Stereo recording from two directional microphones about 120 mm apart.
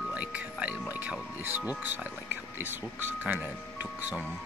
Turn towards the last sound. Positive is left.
turn(degrees=-15)  # may be behind; listen again after turning